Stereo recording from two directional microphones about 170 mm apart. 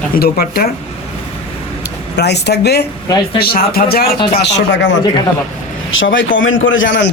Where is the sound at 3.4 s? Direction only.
65° left (ahead or behind).